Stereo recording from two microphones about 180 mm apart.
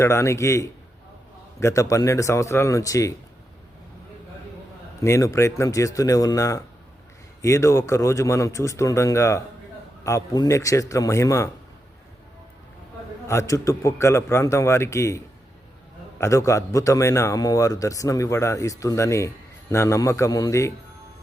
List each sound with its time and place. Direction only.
0.0 s a man's voice: 15° left (ahead or behind)
5.0 s a man's voice: 15° left (ahead or behind)
13.2 s a man's voice: 15° left (ahead or behind)